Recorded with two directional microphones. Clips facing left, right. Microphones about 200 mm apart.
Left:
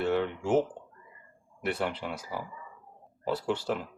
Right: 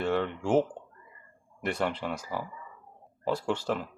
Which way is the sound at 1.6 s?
10° left (ahead or behind).